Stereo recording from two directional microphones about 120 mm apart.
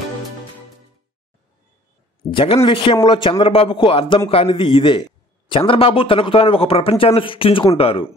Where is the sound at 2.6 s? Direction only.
45° left (ahead or behind).